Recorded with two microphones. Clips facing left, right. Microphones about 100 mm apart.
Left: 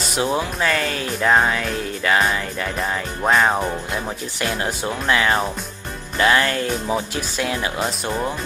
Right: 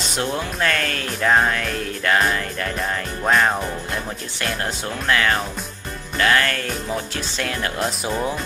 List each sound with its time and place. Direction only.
0.2 s speech: 5° left (ahead or behind)